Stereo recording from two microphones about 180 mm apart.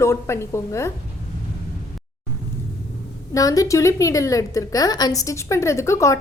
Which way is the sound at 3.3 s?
20° left (ahead or behind).